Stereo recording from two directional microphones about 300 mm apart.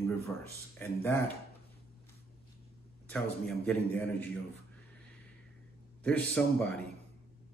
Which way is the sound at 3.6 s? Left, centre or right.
Centre.